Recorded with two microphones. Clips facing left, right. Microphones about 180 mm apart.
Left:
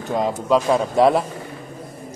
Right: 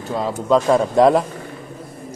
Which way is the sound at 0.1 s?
15° left (ahead or behind).